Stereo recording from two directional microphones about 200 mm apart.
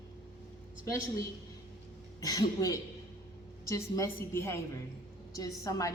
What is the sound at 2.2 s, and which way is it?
Speech, 20° left (ahead or behind).